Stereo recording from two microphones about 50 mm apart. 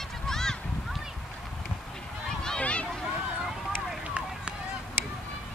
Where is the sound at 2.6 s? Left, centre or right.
Left.